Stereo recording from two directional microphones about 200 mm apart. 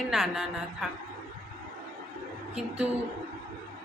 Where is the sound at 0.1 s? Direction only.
Centre (ahead or behind).